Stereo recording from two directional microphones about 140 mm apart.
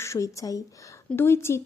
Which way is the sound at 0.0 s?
20° left (ahead or behind).